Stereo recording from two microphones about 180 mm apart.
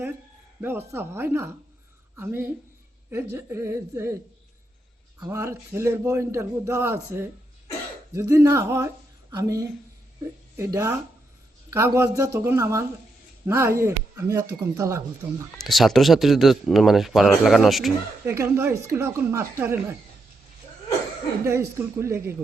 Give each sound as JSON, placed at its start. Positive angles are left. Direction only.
{"t": 0.6, "sound": "a man's voice", "side_deg": -15}
{"t": 5.2, "sound": "a man's voice", "side_deg": -15}
{"t": 15.5, "sound": "speech", "side_deg": 0}
{"t": 18.3, "sound": "a man's voice", "side_deg": -15}
{"t": 21.4, "sound": "a man's voice", "side_deg": -15}